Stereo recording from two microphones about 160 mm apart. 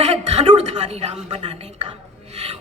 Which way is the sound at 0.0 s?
45° right (ahead or behind).